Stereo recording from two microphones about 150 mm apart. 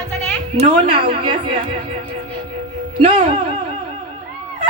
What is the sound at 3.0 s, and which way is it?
Speech, 40° right (ahead or behind).